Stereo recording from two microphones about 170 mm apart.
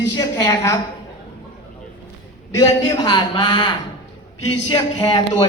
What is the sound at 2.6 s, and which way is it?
Speech, 20° left (ahead or behind).